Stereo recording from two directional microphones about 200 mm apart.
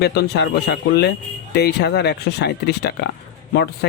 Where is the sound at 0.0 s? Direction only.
55° left (ahead or behind).